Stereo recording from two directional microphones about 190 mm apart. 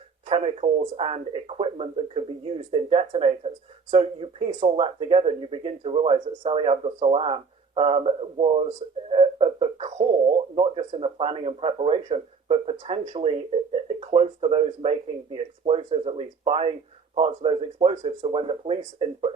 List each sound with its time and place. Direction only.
0.3 s speech: 30° right (ahead or behind)